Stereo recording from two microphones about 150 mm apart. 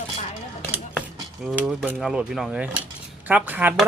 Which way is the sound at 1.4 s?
Centre (ahead or behind).